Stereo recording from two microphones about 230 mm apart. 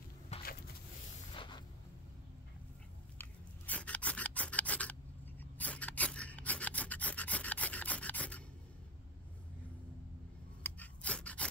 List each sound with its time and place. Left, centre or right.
0.3 s a sound: left
3.2 s scissors: centre
5.4 s filing: centre
10.6 s scissors: centre